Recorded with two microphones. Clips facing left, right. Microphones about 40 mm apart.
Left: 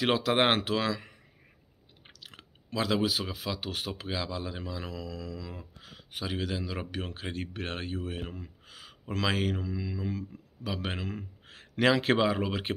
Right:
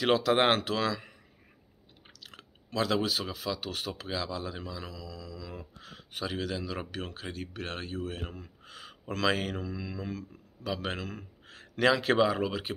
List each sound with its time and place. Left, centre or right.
0.0 s speech: centre
2.0 s speech: centre
5.5 s a sound: centre
6.3 s speech: centre
10.9 s a man's voice: centre